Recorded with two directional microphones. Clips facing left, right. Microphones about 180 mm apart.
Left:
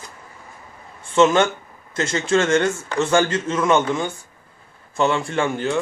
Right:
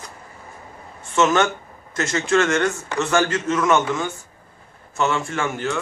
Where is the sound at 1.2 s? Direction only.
30° left (ahead or behind).